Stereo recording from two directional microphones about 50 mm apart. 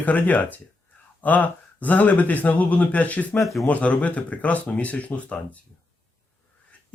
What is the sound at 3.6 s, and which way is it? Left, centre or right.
Speech, left.